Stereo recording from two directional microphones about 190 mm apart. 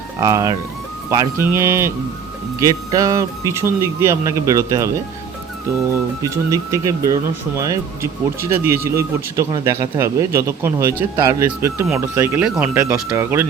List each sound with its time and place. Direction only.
0.2 s speech: 15° right (ahead or behind)
5.9 s speech: 15° right (ahead or behind)